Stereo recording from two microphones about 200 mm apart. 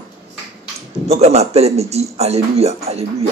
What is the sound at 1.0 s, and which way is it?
Speech, 30° right (ahead or behind).